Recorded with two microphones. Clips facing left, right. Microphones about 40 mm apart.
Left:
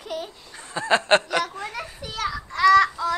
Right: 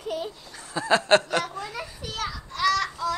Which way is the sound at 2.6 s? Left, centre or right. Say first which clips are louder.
Left 8 dB; left.